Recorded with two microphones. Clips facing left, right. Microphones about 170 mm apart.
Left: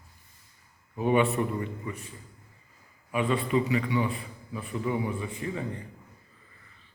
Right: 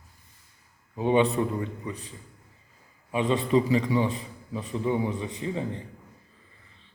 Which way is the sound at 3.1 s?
20° right (ahead or behind).